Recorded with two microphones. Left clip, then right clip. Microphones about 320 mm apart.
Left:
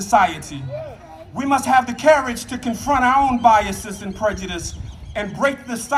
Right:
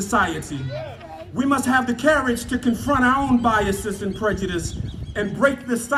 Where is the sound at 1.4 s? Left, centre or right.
Left.